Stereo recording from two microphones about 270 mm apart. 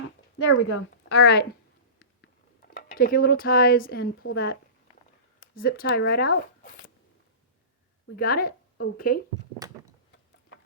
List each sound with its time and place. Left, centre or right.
0.3 s a woman's voice: left
2.2 s a sound: left
4.2 s a woman's voice: left
5.5 s speech: left
8.1 s a woman's voice: left